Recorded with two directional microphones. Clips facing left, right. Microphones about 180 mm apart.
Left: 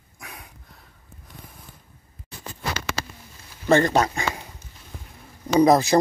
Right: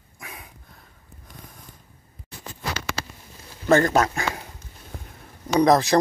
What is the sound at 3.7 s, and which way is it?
Speech, centre (ahead or behind).